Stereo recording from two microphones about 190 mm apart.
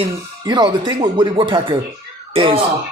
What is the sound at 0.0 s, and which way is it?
Speech, 25° right (ahead or behind).